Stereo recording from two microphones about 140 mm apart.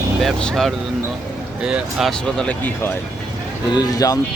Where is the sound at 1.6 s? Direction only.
5° right (ahead or behind).